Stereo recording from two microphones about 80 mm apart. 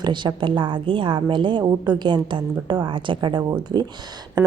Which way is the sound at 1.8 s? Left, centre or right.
Right.